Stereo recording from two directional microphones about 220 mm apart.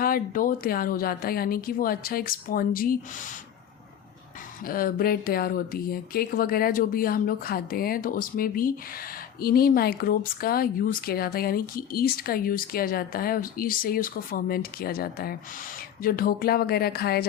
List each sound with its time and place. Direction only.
0.0 s speech: 40° left (ahead or behind)
4.6 s speech: 40° left (ahead or behind)